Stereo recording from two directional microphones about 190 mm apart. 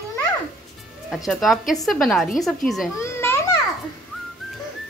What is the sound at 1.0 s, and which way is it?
A woman's voice, centre (ahead or behind).